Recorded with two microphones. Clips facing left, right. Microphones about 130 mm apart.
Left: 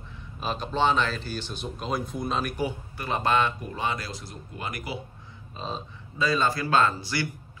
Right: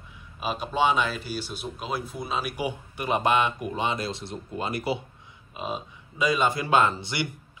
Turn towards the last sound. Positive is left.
turn(degrees=-20)  # may be behind; listen again after turning